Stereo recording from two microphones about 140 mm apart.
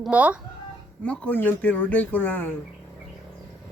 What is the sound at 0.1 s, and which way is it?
Speech, 10° right (ahead or behind).